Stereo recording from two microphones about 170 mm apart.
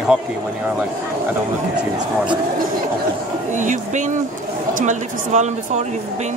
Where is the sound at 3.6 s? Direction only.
45° right (ahead or behind).